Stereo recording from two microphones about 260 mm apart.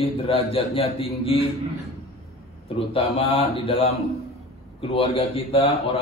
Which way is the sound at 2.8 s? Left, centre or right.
Left.